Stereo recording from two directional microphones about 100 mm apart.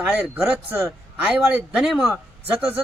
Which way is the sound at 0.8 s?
20° right (ahead or behind).